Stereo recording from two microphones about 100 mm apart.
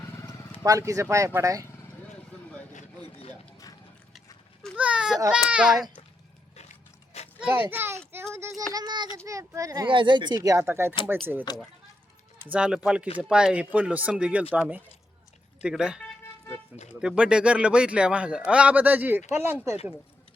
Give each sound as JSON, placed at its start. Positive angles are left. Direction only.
{"t": 0.6, "sound": "a child's voice", "side_deg": -35}
{"t": 4.8, "sound": "speech", "side_deg": -10}
{"t": 7.1, "sound": "a sound", "side_deg": 90}
{"t": 7.5, "sound": "a child's voice", "side_deg": -25}
{"t": 8.7, "sound": "a child's voice", "side_deg": -45}
{"t": 9.8, "sound": "speech", "side_deg": -55}
{"t": 10.6, "sound": "a child's voice", "side_deg": -25}
{"t": 11.5, "sound": "speech", "side_deg": 40}
{"t": 12.4, "sound": "speech", "side_deg": -15}